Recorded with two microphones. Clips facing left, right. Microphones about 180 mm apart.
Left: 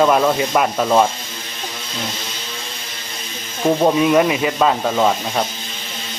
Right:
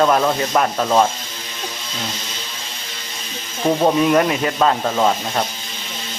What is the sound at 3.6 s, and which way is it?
Speech, centre (ahead or behind).